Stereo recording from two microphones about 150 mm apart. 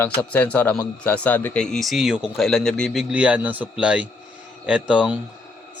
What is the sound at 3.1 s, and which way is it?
Speech, 10° right (ahead or behind).